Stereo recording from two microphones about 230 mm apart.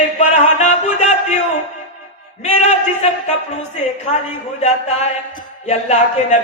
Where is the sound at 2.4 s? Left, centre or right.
Left.